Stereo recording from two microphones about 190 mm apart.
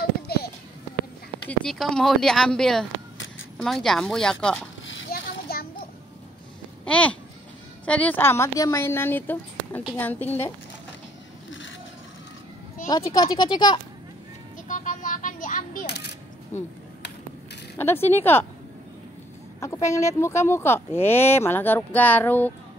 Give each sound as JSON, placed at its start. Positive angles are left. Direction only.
{"t": 0.3, "sound": "a sound", "side_deg": 55}
{"t": 1.5, "sound": "speech", "side_deg": 5}
{"t": 4.8, "sound": "splash", "side_deg": 80}
{"t": 5.1, "sound": "a sound", "side_deg": 50}
{"t": 6.8, "sound": "babbling", "side_deg": 5}
{"t": 7.8, "sound": "speech", "side_deg": 5}
{"t": 12.8, "sound": "speech", "side_deg": 20}
{"t": 14.7, "sound": "a sound", "side_deg": 40}
{"t": 16.5, "sound": "speech", "side_deg": 15}
{"t": 17.7, "sound": "speech", "side_deg": 10}
{"t": 19.6, "sound": "speech", "side_deg": 15}